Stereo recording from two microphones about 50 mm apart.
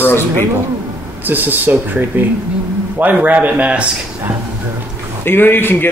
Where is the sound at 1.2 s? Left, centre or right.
Right.